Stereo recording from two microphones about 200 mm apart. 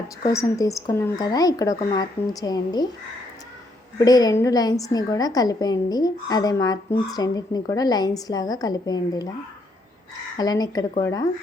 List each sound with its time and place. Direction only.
0.3 s a woman's voice: 15° left (ahead or behind)
3.9 s a woman's voice: 20° left (ahead or behind)
10.3 s a woman's voice: 20° left (ahead or behind)